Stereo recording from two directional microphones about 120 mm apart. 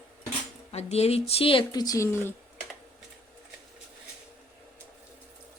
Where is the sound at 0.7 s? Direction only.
60° left (ahead or behind); by 2.4 s 20° left (ahead or behind).